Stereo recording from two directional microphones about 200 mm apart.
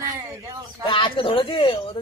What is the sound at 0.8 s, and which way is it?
Speech, 25° left (ahead or behind).